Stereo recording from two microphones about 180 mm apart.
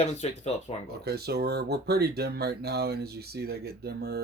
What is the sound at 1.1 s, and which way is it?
Speech, 65° right (ahead or behind).